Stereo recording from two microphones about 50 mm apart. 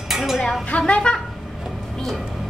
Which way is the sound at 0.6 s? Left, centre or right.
Left.